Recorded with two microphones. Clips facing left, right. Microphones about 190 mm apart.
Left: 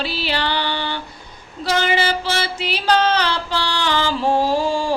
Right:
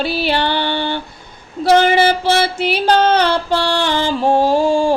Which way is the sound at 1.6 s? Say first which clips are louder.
Right 8 dB; 55° right (ahead or behind).